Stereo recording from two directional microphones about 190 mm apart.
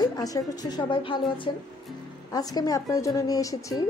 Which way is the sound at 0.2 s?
20° left (ahead or behind).